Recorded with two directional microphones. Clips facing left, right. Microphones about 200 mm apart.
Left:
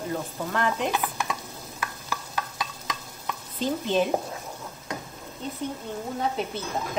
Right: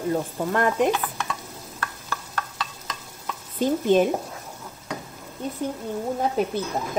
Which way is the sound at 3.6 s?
50° right (ahead or behind).